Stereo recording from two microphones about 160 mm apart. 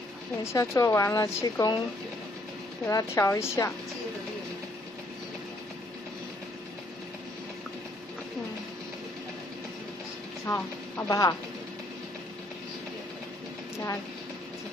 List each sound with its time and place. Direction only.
0.4 s a woman's voice: 20° left (ahead or behind)
2.9 s a woman's voice: 20° left (ahead or behind)
10.4 s speech: 20° left (ahead or behind)